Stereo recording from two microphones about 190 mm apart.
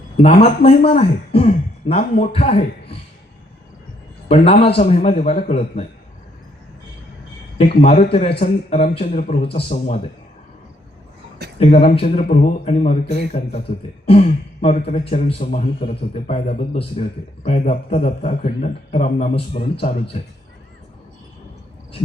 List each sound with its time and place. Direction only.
0.2 s speech: 35° left (ahead or behind)
4.3 s speech: 30° left (ahead or behind)
7.8 s speech: 35° left (ahead or behind)
11.6 s speech: 30° left (ahead or behind)